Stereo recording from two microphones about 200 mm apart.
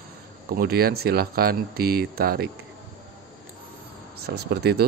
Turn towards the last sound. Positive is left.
turn(degrees=-50)  # may be behind; listen again after turning